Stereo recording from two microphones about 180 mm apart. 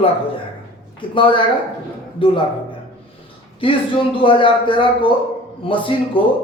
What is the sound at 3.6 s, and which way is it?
A man's voice, 30° left (ahead or behind).